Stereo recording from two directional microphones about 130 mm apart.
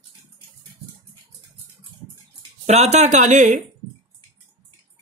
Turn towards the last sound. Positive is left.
turn(degrees=-70)  # may be behind; listen again after turning